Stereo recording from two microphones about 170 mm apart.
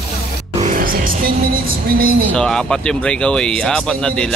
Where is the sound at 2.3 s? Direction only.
5° left (ahead or behind).